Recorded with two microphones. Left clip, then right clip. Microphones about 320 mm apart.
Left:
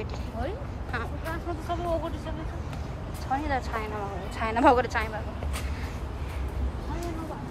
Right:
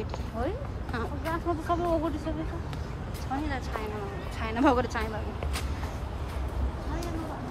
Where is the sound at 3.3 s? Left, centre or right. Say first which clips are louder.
Left 5 dB; centre.